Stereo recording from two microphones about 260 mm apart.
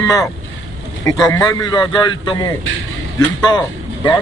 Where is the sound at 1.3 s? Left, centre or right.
Centre.